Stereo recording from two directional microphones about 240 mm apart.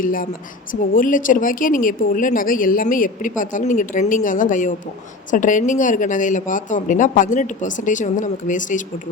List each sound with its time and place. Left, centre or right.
0.0 s a woman's voice: left